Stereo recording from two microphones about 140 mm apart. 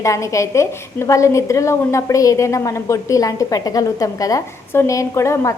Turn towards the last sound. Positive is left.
turn(degrees=20)  # may be behind; listen again after turning